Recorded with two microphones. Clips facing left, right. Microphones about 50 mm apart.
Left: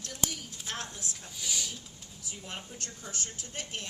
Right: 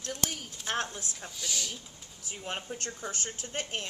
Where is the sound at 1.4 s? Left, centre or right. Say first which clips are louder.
Even; centre.